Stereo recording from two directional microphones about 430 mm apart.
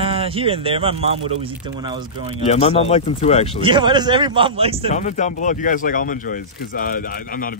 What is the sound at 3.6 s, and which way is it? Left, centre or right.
Speech, centre.